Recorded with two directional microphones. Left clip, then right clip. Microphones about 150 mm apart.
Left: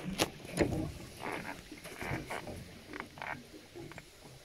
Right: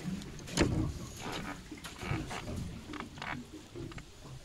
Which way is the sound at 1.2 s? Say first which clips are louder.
Left 1 dB; 55° left (ahead or behind).